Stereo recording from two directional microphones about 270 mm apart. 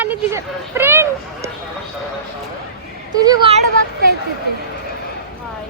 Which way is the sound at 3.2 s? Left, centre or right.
Centre.